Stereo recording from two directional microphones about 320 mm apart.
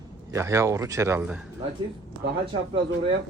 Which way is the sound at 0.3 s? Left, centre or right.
Centre.